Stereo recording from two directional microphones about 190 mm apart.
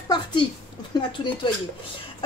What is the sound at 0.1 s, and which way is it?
Female singing, 25° left (ahead or behind).